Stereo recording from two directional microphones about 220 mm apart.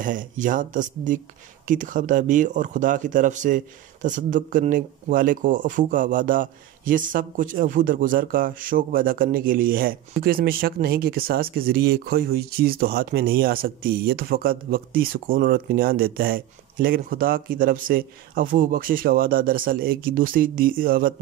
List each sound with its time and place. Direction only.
0.0 s speech: 35° right (ahead or behind)